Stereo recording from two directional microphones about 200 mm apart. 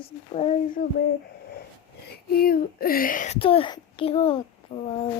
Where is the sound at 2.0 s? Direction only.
50° left (ahead or behind).